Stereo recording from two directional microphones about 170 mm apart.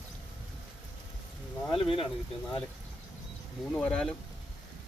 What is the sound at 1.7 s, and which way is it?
Speech, 30° left (ahead or behind).